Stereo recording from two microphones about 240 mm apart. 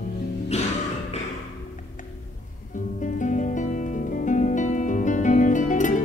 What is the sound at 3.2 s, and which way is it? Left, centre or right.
Music, left.